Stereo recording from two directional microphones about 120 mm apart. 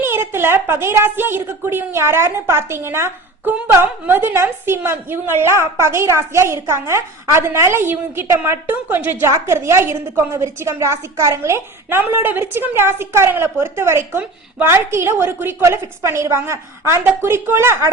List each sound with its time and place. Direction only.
0.0 s a woman's voice: 20° right (ahead or behind)